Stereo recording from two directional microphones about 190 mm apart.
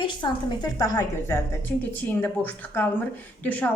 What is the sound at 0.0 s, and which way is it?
A woman's voice, 25° left (ahead or behind).